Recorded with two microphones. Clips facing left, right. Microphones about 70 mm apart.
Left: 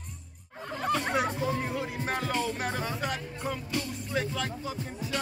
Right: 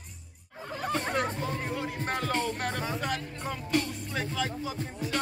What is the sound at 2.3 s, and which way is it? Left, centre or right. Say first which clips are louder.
Music: right 1 dB; right.